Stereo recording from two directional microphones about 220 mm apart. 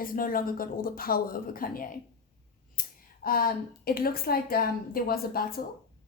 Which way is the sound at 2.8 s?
40° left (ahead or behind).